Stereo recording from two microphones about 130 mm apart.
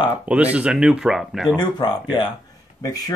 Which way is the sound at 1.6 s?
35° left (ahead or behind).